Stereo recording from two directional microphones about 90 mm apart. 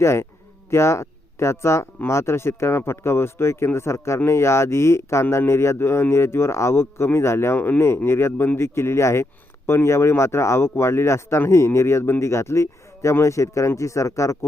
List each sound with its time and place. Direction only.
0.0 s speech: 30° left (ahead or behind)